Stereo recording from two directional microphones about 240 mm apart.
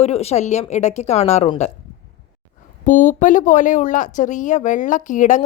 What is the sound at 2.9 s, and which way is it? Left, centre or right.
Speech, left.